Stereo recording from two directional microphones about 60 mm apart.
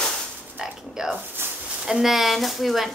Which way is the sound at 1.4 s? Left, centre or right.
Right.